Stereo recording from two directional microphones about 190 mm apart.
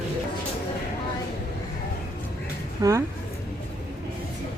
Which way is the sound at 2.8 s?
20° right (ahead or behind).